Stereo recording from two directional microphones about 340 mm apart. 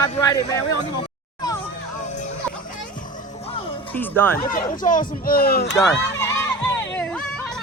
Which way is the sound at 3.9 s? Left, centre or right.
Centre.